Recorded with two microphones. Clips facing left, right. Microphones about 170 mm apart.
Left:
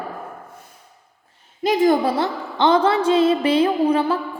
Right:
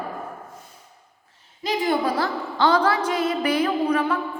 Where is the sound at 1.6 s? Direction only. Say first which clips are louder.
Left 7 dB; 45° left (ahead or behind).